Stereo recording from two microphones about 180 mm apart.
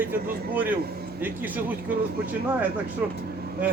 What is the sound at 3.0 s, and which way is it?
Speech, 5° right (ahead or behind).